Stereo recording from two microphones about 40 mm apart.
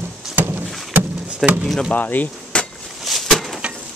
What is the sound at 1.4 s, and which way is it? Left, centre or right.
Speech, centre.